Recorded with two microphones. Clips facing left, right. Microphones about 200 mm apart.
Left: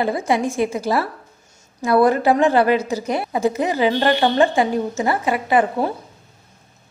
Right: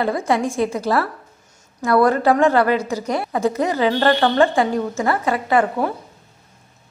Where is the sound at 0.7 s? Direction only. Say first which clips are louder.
Right 1 dB; 20° left (ahead or behind).